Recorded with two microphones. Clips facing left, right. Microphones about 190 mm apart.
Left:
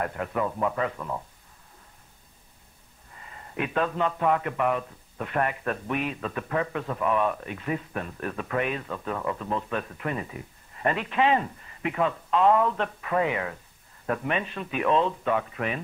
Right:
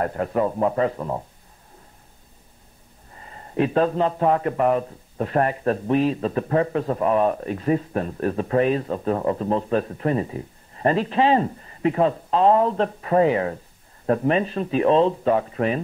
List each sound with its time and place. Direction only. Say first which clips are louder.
0.0 s a man's voice: right 6 dB; 35° right (ahead or behind)
3.2 s a man's voice: right 9 dB; 35° right (ahead or behind)